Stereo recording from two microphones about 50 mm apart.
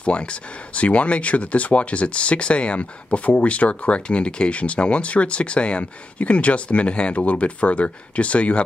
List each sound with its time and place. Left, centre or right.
0.0 s speech: left